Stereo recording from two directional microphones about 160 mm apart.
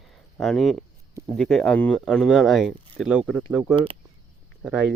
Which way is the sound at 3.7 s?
35° right (ahead or behind).